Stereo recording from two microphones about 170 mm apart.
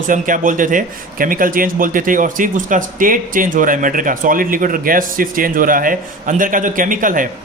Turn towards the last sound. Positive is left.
turn(degrees=-50)  # may be behind; listen again after turning